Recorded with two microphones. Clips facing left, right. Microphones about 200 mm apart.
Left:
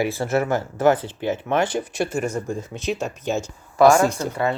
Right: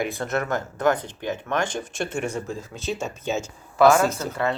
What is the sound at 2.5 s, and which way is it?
Speech, 20° left (ahead or behind).